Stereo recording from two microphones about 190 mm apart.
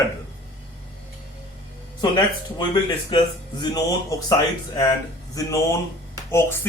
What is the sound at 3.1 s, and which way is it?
Speech, 25° left (ahead or behind).